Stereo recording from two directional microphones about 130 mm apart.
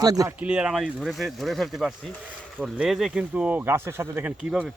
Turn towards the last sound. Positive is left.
turn(degrees=-5)  # may be behind; listen again after turning